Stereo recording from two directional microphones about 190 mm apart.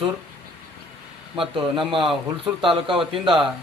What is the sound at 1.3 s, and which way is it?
Speech, 25° right (ahead or behind).